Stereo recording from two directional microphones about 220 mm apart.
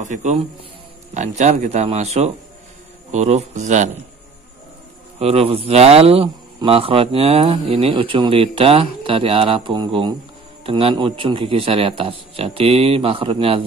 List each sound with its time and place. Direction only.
0.0 s a man's voice: 30° right (ahead or behind)
5.2 s a man's voice: 25° right (ahead or behind)